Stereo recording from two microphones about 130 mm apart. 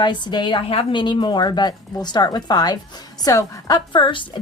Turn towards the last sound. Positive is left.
turn(degrees=40)  # may be behind; listen again after turning